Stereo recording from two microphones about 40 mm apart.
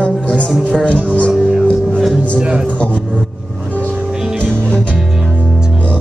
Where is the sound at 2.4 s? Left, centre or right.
Right.